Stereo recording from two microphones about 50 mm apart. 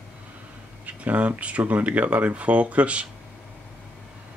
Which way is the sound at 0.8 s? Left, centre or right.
Right.